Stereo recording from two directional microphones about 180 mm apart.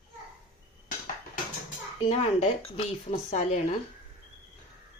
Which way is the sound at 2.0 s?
35° left (ahead or behind).